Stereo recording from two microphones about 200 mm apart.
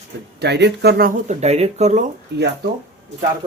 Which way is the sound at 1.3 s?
35° right (ahead or behind).